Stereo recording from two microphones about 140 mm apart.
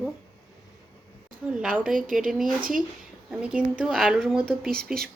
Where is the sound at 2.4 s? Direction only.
80° right.